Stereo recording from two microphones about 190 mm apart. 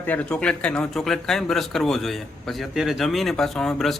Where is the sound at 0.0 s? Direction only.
10° left (ahead or behind).